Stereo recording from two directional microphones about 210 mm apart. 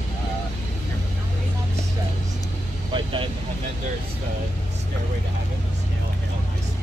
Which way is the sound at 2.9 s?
25° right (ahead or behind).